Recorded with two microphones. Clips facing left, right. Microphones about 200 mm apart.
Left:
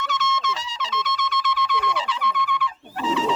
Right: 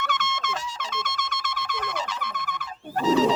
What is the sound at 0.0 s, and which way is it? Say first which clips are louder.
Trumpet: left 3 dB; 55° right (ahead or behind).